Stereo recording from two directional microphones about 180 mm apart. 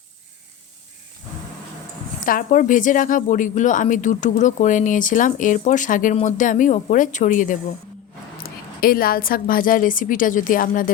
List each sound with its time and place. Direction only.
2.2 s a woman's voice: 50° left (ahead or behind)